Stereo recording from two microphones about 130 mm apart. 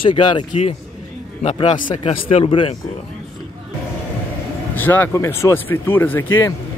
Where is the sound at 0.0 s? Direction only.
35° left (ahead or behind).